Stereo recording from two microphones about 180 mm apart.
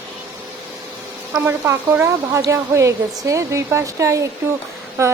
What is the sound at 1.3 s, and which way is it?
A woman's voice, 15° right (ahead or behind).